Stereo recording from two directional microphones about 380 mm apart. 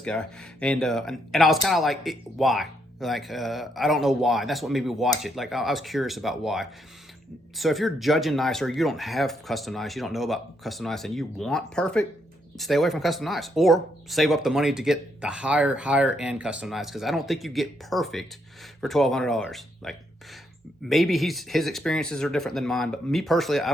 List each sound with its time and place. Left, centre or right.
0.0 s speech: centre